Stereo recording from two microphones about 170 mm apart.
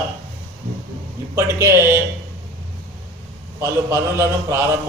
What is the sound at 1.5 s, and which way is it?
Speech, 15° right (ahead or behind).